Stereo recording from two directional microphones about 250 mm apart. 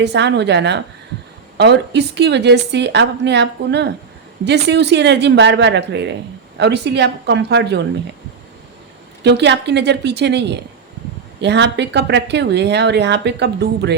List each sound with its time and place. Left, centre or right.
0.0 s speech: right
9.2 s speech: right